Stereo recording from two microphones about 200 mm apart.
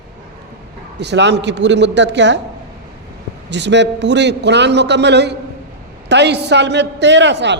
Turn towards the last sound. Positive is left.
turn(degrees=-60)  # may be behind; listen again after turning